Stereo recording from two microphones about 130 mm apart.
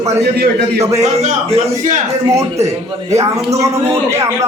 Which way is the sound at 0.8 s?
55° right (ahead or behind).